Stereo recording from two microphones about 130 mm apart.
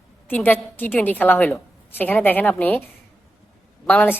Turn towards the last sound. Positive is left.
turn(degrees=10)  # may be behind; listen again after turning